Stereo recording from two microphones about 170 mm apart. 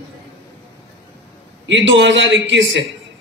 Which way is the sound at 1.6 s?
90° right.